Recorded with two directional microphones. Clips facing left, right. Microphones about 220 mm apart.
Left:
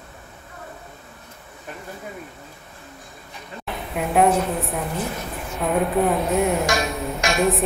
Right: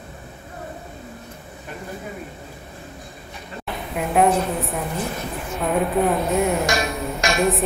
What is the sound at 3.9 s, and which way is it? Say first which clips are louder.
Speech: even; centre (ahead or behind).